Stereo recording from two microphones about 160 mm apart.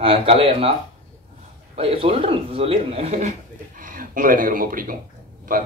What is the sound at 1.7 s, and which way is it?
A man's voice, 35° right (ahead or behind).